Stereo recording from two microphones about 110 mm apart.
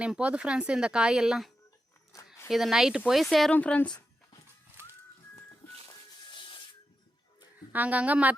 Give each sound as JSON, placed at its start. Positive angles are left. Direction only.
{"t": 0.0, "sound": "speech", "side_deg": -10}
{"t": 2.1, "sound": "zipper", "side_deg": 25}
{"t": 2.5, "sound": "speech", "side_deg": -5}
{"t": 3.5, "sound": "a woman's voice", "side_deg": 15}
{"t": 7.7, "sound": "speech", "side_deg": -15}